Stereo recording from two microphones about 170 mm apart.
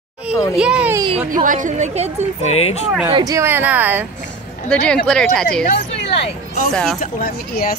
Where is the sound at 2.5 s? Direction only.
40° left (ahead or behind).